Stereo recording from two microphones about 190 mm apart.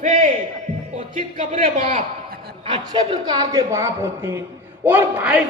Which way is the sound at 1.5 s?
30° right (ahead or behind).